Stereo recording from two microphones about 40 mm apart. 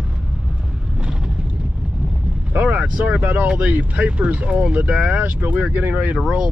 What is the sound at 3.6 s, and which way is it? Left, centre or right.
Speech, right.